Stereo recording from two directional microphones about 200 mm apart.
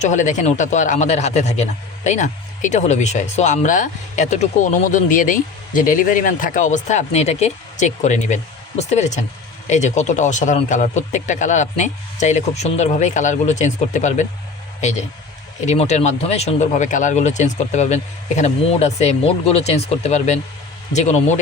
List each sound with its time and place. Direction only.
0.0 s speech: 40° left (ahead or behind)
15.6 s speech: 35° left (ahead or behind)